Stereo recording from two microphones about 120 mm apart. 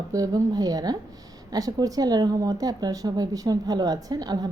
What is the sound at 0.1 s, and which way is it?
A woman's voice, 30° right (ahead or behind).